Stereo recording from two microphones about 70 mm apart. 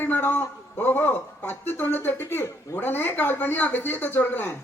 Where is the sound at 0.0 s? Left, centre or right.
Left.